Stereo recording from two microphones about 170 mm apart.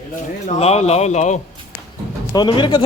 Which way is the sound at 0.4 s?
40° left (ahead or behind).